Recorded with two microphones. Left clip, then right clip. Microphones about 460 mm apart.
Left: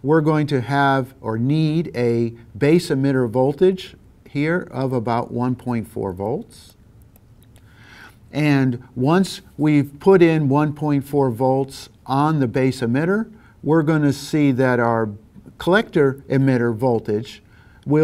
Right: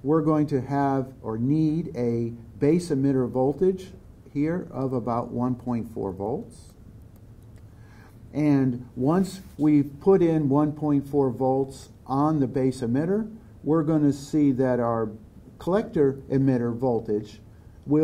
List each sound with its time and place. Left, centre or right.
0.0 s speech: left
8.0 s speech: left